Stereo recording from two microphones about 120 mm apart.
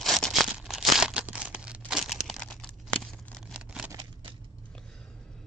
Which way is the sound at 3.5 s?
5° right (ahead or behind).